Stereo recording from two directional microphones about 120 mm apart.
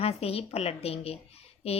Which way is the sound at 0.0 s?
55° left (ahead or behind).